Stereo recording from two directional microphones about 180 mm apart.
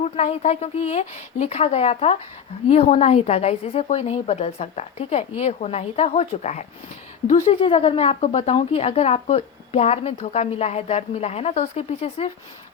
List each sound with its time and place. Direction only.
0.0 s a woman's voice: 35° left (ahead or behind)